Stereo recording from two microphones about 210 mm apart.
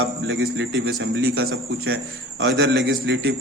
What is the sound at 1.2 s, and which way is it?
A man's voice, 50° right (ahead or behind).